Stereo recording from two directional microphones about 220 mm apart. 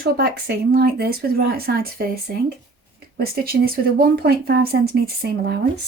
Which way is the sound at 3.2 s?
45° right (ahead or behind).